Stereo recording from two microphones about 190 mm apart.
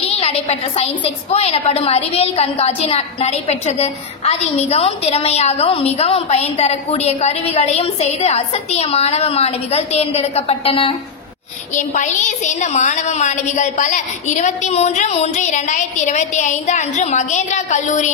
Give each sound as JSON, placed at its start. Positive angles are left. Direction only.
{"t": 0.0, "sound": "a woman's voice", "side_deg": 30}
{"t": 11.7, "sound": "a woman's voice", "side_deg": 40}